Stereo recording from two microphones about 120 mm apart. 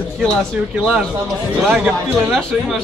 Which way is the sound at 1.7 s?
Centre (ahead or behind).